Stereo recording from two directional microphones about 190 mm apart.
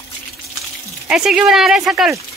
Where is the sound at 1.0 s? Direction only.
5° right (ahead or behind).